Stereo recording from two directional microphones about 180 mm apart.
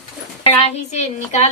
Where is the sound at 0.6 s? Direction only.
35° left (ahead or behind).